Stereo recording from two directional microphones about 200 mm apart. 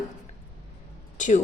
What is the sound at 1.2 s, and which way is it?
Speech, 40° left (ahead or behind).